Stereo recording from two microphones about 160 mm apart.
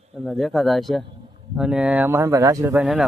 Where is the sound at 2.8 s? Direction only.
5° right (ahead or behind).